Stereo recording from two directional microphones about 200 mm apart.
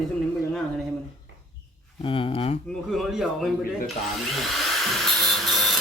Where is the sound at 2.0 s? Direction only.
25° left (ahead or behind).